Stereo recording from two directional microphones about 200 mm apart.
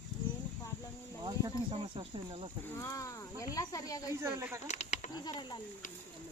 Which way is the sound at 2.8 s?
15° left (ahead or behind).